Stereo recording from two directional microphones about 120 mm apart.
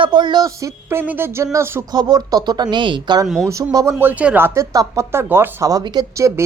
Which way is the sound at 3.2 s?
Centre (ahead or behind).